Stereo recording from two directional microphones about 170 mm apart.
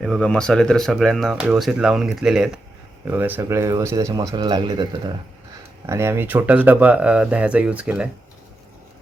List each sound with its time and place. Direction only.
0.0 s speech: centre (ahead or behind)